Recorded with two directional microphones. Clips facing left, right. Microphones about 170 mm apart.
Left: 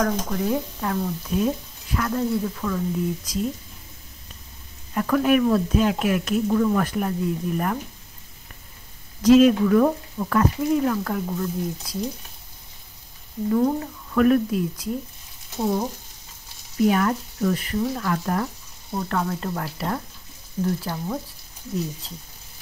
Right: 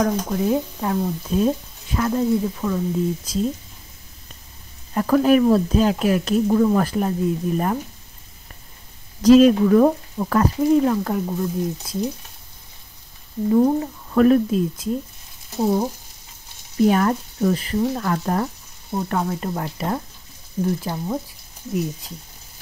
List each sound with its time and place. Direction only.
0.0 s speech: 20° right (ahead or behind)
4.9 s speech: 35° right (ahead or behind)
9.2 s speech: 35° right (ahead or behind)
11.1 s speech: 20° right (ahead or behind)
13.5 s speech: 20° right (ahead or behind)
16.8 s speech: 35° right (ahead or behind)
18.9 s speech: 20° right (ahead or behind)